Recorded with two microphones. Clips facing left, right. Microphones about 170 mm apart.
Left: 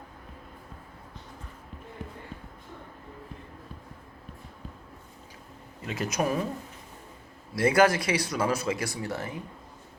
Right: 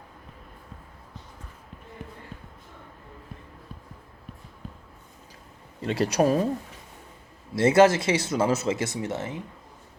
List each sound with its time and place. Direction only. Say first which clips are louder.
5.8 s speech: right 6 dB; 35° right (ahead or behind)
7.5 s speech: right 4 dB; 25° right (ahead or behind)